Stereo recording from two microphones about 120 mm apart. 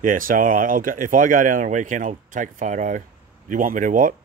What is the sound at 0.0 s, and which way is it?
Speech, 90° right.